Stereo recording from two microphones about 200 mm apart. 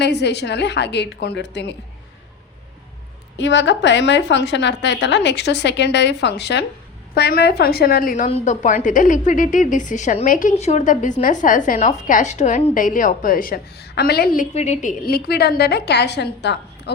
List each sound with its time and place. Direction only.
0.0 s a woman's voice: 55° left (ahead or behind)
3.3 s a woman's voice: 65° left (ahead or behind)
14.5 s a woman's voice: 35° left (ahead or behind); by 16.9 s 60° left (ahead or behind)